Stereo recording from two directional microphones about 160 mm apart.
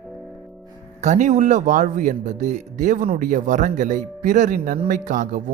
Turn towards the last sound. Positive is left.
turn(degrees=-55)  # may be behind; listen again after turning